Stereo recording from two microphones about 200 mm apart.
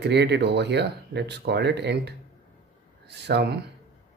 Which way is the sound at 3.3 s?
55° right (ahead or behind).